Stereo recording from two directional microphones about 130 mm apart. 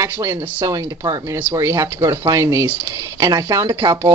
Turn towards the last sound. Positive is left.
turn(degrees=-25)  # may be behind; listen again after turning